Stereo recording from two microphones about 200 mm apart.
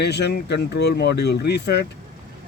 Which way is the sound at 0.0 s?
55° left (ahead or behind).